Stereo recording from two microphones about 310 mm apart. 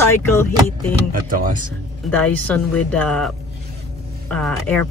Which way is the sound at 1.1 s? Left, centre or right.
Right.